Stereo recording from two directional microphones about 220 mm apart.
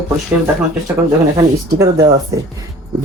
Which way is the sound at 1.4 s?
15° right (ahead or behind).